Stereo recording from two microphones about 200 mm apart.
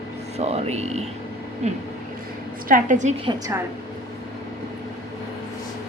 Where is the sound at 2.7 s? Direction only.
40° right (ahead or behind).